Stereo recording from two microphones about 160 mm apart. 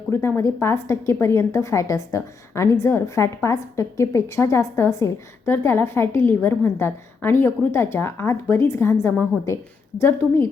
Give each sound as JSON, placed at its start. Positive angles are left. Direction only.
{"t": 0.1, "sound": "a woman's voice", "side_deg": 15}